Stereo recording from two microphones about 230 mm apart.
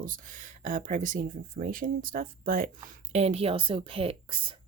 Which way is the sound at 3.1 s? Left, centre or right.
Right.